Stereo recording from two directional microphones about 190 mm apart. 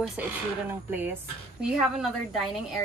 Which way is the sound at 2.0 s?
Centre (ahead or behind).